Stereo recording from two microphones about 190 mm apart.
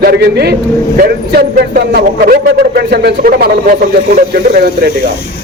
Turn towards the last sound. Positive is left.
turn(degrees=-55)  # may be behind; listen again after turning